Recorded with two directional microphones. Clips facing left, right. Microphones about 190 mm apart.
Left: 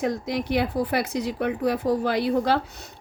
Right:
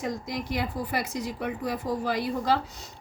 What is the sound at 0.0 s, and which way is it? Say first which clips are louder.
Speech: left 6 dB; 70° left (ahead or behind).